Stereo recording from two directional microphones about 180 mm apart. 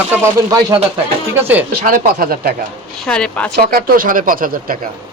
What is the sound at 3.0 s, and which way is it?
Speech, 5° left (ahead or behind).